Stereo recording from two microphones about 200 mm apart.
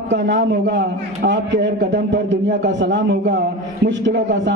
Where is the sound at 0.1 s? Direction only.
60° right (ahead or behind).